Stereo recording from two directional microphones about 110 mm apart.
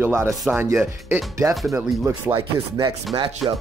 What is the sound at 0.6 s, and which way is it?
Speech, 25° right (ahead or behind).